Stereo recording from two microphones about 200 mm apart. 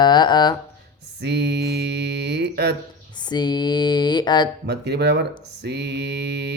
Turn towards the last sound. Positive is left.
turn(degrees=-55)  # may be behind; listen again after turning